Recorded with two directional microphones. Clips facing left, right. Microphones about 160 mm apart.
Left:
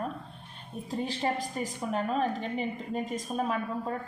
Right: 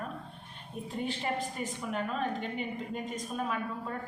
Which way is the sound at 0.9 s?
35° left (ahead or behind).